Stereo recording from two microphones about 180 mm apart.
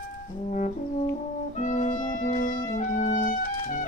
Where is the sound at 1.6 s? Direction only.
45° left (ahead or behind).